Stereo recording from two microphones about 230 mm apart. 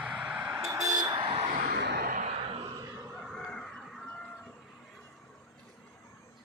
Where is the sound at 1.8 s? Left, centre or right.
Right.